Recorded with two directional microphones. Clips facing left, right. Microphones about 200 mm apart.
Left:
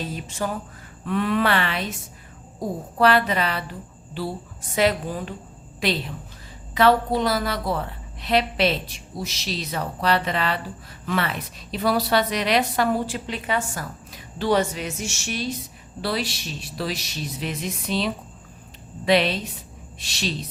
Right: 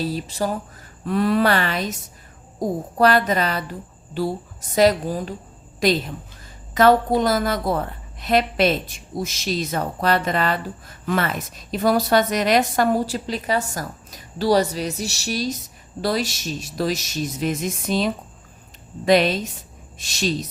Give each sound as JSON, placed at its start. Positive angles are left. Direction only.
{"t": 0.0, "sound": "a woman's voice", "side_deg": -35}